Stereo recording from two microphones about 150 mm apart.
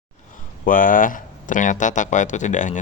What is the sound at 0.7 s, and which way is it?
Speech, 65° left (ahead or behind).